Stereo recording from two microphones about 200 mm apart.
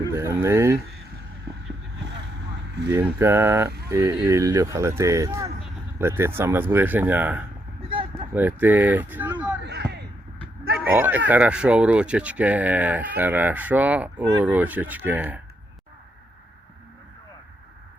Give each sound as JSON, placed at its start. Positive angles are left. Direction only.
{"t": 0.1, "sound": "speech", "side_deg": -15}
{"t": 2.9, "sound": "speech", "side_deg": -10}
{"t": 7.8, "sound": "a sound", "side_deg": -25}
{"t": 8.3, "sound": "speech", "side_deg": -10}
{"t": 9.6, "sound": "a sound", "side_deg": -55}
{"t": 10.9, "sound": "speech", "side_deg": -10}